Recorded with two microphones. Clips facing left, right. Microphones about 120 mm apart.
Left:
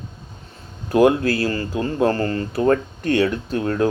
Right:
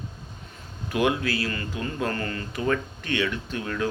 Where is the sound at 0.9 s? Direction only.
40° left (ahead or behind).